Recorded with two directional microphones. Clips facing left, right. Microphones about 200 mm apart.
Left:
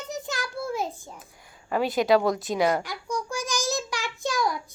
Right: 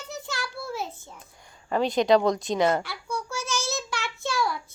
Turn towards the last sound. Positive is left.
turn(degrees=15)  # may be behind; listen again after turning